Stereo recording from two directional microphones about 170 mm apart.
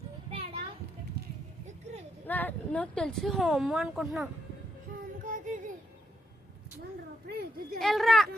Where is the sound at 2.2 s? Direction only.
10° left (ahead or behind).